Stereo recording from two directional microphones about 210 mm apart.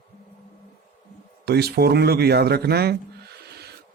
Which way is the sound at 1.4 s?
50° right (ahead or behind).